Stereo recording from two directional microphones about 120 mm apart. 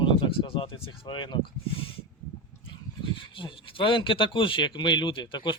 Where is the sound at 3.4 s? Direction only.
45° left (ahead or behind).